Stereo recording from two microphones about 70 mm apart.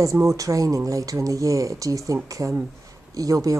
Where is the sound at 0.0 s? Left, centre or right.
Right.